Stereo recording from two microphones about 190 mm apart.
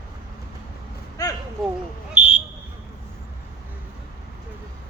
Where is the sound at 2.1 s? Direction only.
5° right (ahead or behind).